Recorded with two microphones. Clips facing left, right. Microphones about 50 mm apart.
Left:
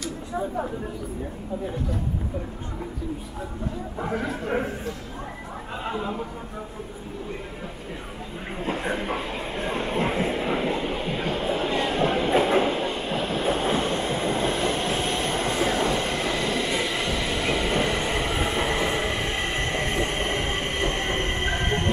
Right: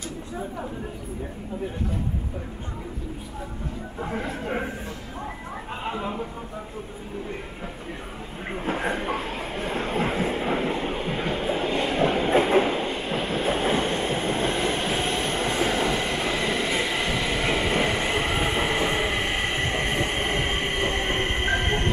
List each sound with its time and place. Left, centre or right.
4.0 s speech: centre
5.9 s speech: centre
8.9 s speech: centre
9.2 s train: right
10.2 s train: centre
10.8 s train: centre
11.3 s a sound: centre
11.9 s train: centre
12.2 s train: right
12.4 s train: centre